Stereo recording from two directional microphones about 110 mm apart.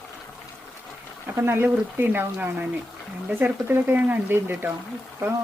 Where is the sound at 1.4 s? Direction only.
20° right (ahead or behind).